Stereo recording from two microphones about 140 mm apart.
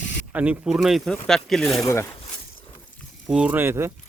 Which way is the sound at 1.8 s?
20° left (ahead or behind).